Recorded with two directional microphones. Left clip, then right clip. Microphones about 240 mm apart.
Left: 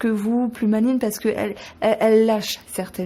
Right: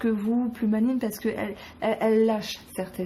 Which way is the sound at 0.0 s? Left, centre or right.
Left.